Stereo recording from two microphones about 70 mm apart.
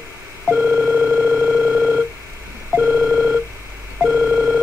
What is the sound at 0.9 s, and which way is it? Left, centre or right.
Dial tone, centre.